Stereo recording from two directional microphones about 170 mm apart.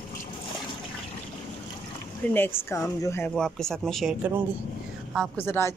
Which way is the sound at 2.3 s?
10° left (ahead or behind).